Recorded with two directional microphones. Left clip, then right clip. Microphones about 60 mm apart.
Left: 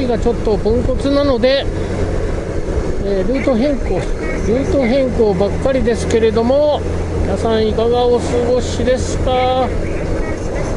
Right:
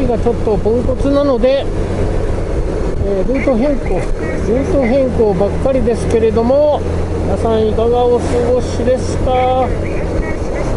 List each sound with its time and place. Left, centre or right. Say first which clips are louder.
0.1 s speech: right 1 dB; left
3.3 s speech: right 1 dB; left